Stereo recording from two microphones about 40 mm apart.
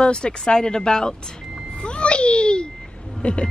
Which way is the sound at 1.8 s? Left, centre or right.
Left.